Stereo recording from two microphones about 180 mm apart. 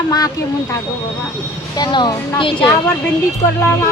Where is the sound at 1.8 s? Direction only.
25° left (ahead or behind).